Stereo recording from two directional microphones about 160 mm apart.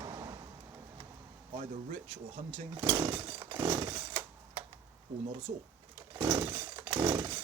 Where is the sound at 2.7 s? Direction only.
20° right (ahead or behind).